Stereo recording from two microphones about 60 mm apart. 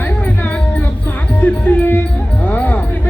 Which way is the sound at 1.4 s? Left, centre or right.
Left.